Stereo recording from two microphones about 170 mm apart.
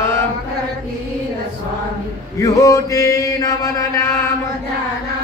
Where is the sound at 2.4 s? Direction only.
20° left (ahead or behind).